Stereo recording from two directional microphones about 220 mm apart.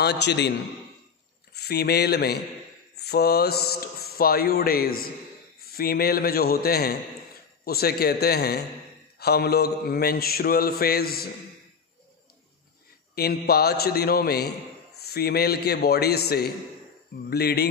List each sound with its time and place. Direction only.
0.0 s mantra: 50° left (ahead or behind)
1.5 s speech: 45° left (ahead or behind)
3.0 s mantra: 45° left (ahead or behind)
13.1 s mantra: 45° left (ahead or behind)